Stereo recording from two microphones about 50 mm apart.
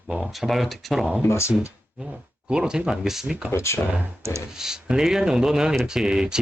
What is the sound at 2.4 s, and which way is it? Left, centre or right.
Speech, centre.